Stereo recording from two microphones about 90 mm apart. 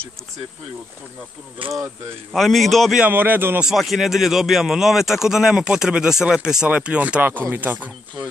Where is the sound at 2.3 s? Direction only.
Centre (ahead or behind).